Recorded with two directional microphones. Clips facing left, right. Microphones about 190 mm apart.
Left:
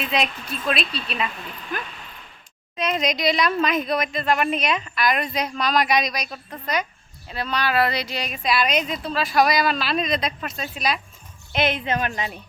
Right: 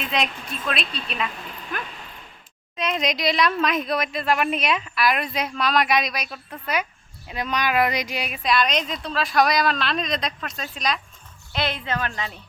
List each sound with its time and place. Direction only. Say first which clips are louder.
0.0 s speech: left 1 dB; centre (ahead or behind)
2.7 s speech: left 1 dB; centre (ahead or behind)
11.5 s a woman's voice: left 4 dB; 20° left (ahead or behind)